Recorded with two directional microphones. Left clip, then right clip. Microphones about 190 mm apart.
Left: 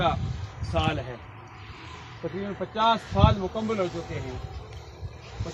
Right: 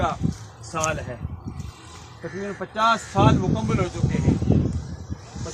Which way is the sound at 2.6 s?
45° left (ahead or behind).